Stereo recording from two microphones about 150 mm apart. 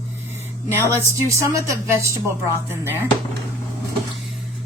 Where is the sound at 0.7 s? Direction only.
20° right (ahead or behind).